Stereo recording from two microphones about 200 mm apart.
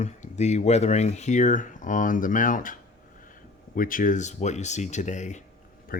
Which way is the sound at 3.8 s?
45° left (ahead or behind).